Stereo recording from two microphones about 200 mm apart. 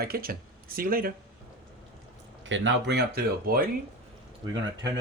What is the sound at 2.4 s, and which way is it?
Speech, 65° right (ahead or behind).